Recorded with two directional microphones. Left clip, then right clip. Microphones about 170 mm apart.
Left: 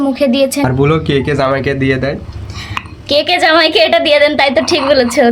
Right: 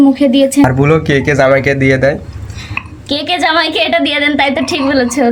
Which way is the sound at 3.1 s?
45° left (ahead or behind).